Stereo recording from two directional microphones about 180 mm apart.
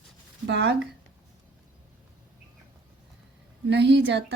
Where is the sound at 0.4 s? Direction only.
70° right (ahead or behind).